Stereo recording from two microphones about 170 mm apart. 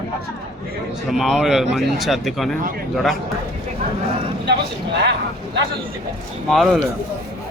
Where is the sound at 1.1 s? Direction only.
Centre (ahead or behind).